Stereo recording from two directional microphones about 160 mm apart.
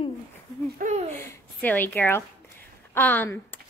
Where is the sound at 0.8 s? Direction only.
50° right (ahead or behind).